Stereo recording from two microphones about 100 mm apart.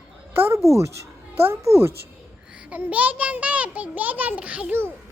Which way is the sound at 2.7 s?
15° right (ahead or behind).